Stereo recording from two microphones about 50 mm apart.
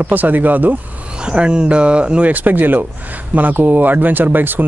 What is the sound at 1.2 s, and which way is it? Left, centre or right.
A man's voice, centre.